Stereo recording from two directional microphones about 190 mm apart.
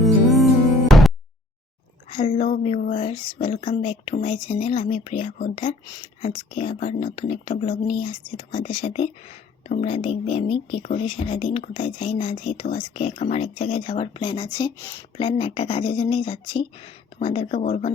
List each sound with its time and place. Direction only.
0.0 s music: centre (ahead or behind)
2.0 s speech: 30° left (ahead or behind)
15.2 s speech: 30° left (ahead or behind)